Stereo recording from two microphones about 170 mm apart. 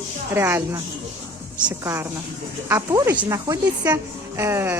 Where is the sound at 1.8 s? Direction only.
15° right (ahead or behind).